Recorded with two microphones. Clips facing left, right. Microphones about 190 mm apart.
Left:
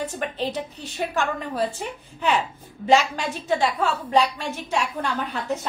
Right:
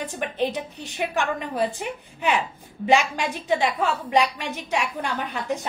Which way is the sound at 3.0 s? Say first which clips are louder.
Even; 15° right (ahead or behind).